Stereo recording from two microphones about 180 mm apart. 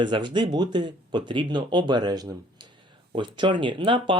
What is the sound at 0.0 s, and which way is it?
Speech, 25° right (ahead or behind).